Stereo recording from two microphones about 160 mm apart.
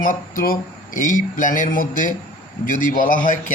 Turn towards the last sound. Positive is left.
turn(degrees=55)  # may be behind; listen again after turning